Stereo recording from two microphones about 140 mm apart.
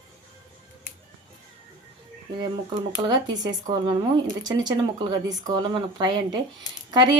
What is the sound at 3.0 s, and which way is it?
Speech, 30° right (ahead or behind).